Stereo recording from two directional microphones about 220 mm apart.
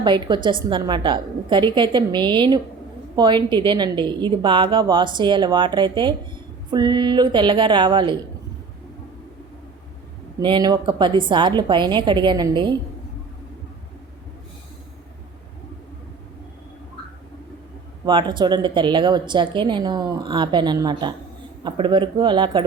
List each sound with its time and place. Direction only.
0.0 s a woman's voice: 20° right (ahead or behind)
10.4 s a woman's voice: 20° right (ahead or behind)
18.0 s a woman's voice: 20° right (ahead or behind)